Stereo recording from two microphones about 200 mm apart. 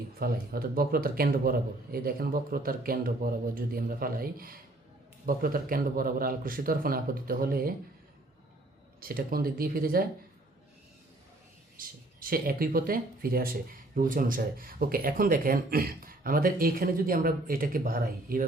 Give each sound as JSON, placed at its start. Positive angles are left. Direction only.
{"t": 0.2, "sound": "speech", "side_deg": -50}
{"t": 9.0, "sound": "speech", "side_deg": -50}
{"t": 11.8, "sound": "speech", "side_deg": -45}